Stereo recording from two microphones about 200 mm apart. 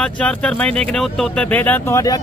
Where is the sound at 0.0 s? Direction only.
5° left (ahead or behind).